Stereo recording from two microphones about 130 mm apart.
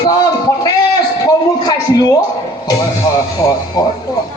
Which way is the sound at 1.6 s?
30° left (ahead or behind).